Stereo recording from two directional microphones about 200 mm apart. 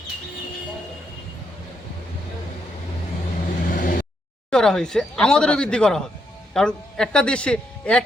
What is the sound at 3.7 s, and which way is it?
Vehicle, 45° left (ahead or behind).